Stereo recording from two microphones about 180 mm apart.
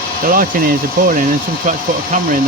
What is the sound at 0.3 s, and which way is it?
Speech, 50° right (ahead or behind).